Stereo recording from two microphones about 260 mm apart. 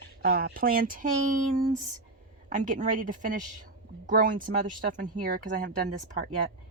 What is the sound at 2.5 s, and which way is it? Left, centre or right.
Speech, right.